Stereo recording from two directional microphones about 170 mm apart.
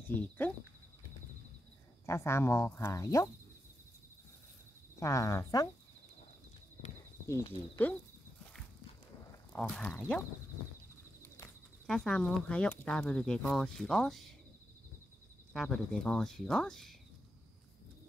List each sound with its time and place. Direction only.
0.1 s speech: 10° left (ahead or behind)
2.0 s speech: 15° left (ahead or behind)
5.0 s speech: 20° left (ahead or behind)
7.8 s speech: 10° left (ahead or behind)
9.5 s speech: 5° left (ahead or behind)
11.2 s a sound: 15° left (ahead or behind)
11.8 s speech: 5° left (ahead or behind)
15.5 s speech: centre (ahead or behind)